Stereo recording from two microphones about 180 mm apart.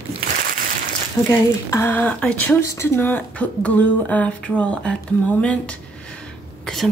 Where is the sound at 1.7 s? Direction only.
10° left (ahead or behind).